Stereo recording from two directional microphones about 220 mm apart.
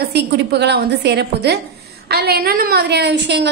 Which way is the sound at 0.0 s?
50° right (ahead or behind).